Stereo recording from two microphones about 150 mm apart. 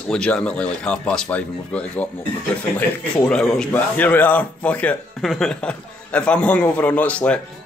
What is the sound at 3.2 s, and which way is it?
Speech, 5° left (ahead or behind).